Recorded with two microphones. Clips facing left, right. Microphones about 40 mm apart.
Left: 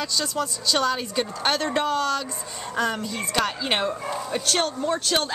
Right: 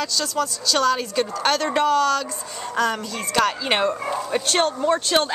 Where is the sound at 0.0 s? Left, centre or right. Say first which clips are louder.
Right 3 dB; centre.